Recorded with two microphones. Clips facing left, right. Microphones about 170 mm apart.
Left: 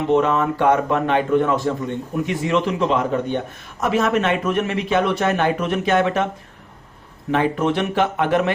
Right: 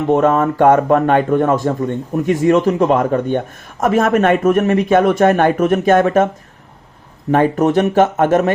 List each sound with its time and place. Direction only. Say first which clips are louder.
0.1 s a man's voice: right 5 dB; 45° right (ahead or behind)
7.3 s a man's voice: right 6 dB; 45° right (ahead or behind)